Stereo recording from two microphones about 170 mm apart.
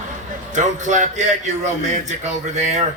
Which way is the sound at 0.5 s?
45° right (ahead or behind).